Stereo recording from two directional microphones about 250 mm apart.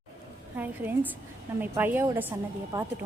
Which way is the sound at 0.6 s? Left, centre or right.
Centre.